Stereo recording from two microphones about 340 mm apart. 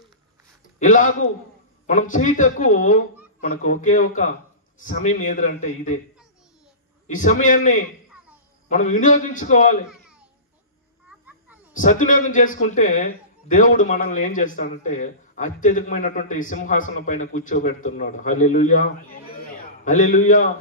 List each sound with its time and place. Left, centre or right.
0.7 s a man's voice: left
7.2 s a man's voice: left
11.1 s children playing: centre
11.7 s a man's voice: left